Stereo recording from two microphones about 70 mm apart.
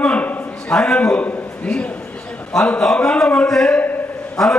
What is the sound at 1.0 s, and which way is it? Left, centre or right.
A man's voice, centre.